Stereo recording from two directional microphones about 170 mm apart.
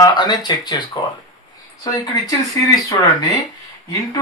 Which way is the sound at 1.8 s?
20° left (ahead or behind).